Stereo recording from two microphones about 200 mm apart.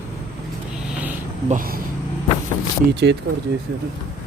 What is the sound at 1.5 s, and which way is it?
Speech, 45° right (ahead or behind).